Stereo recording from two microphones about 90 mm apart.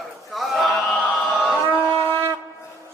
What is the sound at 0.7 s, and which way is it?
Chant, 15° left (ahead or behind).